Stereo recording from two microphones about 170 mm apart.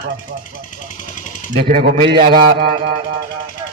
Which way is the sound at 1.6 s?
65° right (ahead or behind).